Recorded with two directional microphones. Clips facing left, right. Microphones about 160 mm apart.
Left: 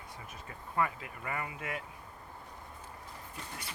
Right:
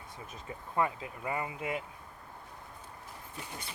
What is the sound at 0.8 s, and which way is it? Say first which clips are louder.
Speech: right 2 dB; 25° right (ahead or behind).